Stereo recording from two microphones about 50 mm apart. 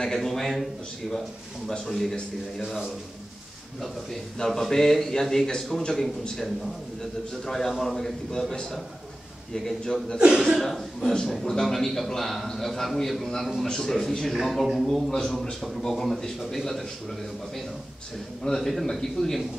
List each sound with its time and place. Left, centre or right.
0.0 s a man's voice: centre
1.9 s a man's voice: centre
3.8 s a man's voice: centre
10.1 s speech: centre
10.6 s a man's voice: centre
18.4 s a man's voice: centre